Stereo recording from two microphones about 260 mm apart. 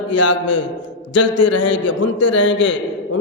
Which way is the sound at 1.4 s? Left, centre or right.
Left.